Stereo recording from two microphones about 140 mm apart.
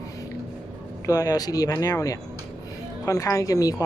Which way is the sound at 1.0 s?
25° left (ahead or behind).